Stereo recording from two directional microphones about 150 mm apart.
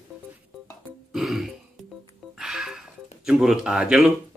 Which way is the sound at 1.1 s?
Centre (ahead or behind).